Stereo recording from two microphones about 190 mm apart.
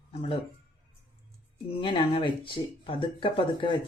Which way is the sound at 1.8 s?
25° left (ahead or behind).